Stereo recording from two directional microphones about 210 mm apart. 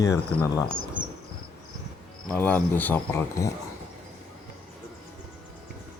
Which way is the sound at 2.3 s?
5° left (ahead or behind).